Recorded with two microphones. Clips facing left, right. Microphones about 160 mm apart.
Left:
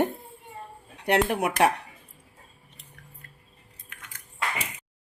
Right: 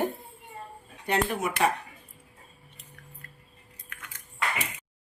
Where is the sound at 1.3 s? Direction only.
70° left (ahead or behind).